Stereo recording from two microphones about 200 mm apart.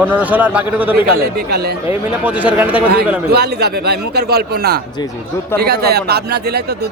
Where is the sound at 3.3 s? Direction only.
55° right (ahead or behind).